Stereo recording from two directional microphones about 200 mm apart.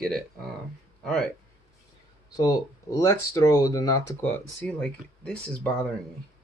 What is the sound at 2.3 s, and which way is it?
Speech, 15° left (ahead or behind).